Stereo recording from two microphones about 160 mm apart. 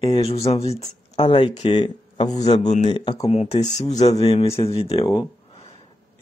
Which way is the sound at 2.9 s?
30° left (ahead or behind).